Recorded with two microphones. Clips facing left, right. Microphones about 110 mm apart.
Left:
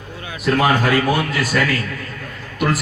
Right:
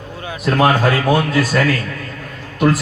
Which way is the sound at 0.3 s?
30° right (ahead or behind).